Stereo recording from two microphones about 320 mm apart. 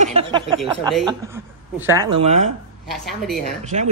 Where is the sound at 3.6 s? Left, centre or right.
Right.